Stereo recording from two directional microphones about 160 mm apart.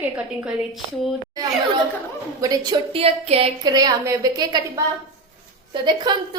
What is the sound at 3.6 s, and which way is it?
Speech, 25° right (ahead or behind).